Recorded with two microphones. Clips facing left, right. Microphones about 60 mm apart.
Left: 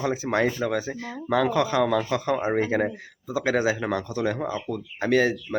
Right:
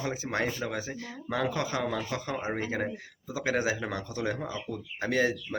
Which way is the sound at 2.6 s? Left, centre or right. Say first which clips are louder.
Left 8 dB; left.